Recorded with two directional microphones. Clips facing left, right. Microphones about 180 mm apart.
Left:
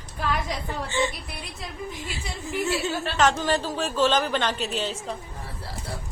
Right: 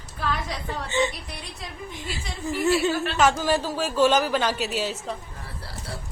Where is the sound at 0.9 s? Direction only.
20° right (ahead or behind).